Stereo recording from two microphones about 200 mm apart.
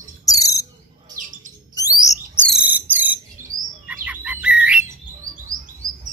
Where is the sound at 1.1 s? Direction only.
40° right (ahead or behind).